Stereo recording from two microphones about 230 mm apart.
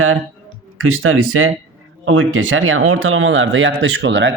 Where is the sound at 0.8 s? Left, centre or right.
Right.